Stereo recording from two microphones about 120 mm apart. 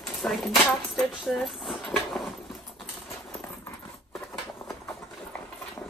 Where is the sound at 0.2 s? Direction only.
15° left (ahead or behind).